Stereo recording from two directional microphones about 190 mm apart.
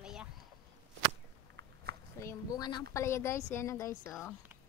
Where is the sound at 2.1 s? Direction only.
15° left (ahead or behind).